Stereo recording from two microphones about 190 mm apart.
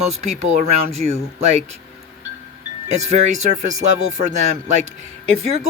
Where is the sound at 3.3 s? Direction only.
40° right (ahead or behind).